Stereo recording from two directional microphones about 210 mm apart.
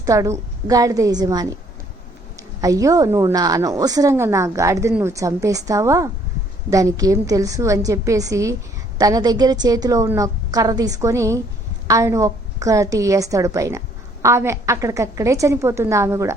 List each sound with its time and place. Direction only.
0.0 s a woman's voice: 15° right (ahead or behind)